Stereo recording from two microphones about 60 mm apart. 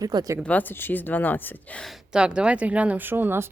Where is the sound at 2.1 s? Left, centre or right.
Centre; by 3.4 s right.